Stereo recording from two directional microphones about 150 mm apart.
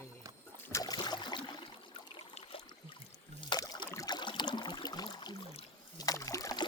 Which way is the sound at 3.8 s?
20° left (ahead or behind).